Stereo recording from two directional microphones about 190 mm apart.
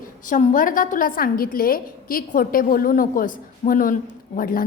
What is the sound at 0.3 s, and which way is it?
A woman's voice, 45° left (ahead or behind).